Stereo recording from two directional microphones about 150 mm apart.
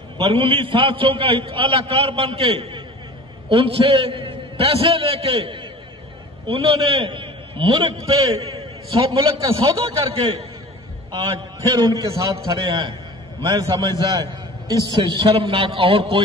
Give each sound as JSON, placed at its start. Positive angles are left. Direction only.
{"t": 0.2, "sound": "a man's voice", "side_deg": -35}